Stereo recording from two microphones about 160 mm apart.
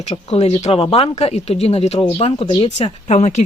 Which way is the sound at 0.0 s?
40° left (ahead or behind).